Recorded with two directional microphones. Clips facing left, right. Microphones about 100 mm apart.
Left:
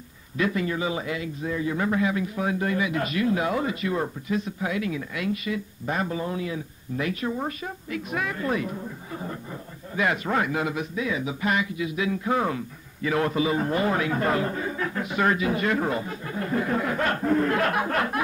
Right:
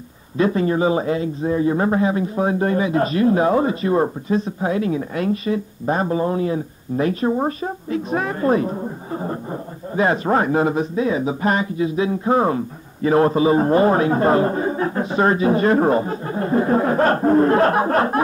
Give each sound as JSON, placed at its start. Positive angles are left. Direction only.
{"t": 0.4, "sound": "a man's voice", "side_deg": -35}